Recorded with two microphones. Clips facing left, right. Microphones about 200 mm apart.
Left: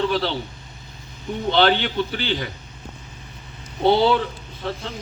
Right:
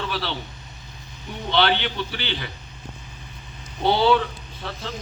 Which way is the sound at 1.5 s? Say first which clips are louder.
Left 3 dB; 45° left (ahead or behind).